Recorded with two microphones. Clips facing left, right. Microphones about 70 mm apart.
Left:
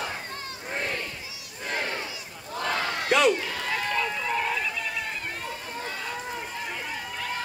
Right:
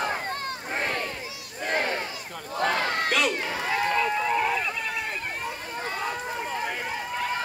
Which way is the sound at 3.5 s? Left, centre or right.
Right.